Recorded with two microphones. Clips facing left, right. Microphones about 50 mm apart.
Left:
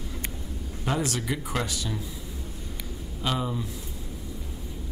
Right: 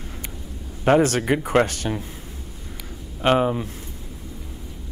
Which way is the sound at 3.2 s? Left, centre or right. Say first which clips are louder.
Right 10 dB; right.